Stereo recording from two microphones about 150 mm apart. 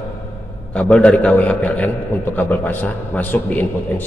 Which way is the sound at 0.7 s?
10° left (ahead or behind).